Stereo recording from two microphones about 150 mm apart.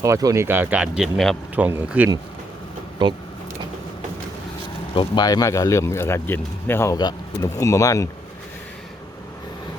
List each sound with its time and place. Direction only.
0.0 s speech: 20° right (ahead or behind); by 1.4 s centre (ahead or behind)
1.5 s speech: 10° right (ahead or behind)
3.0 s speech: 30° right (ahead or behind)
4.9 s speech: 25° left (ahead or behind)